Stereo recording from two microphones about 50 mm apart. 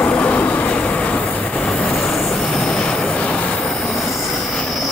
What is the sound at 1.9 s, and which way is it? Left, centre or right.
Train, centre.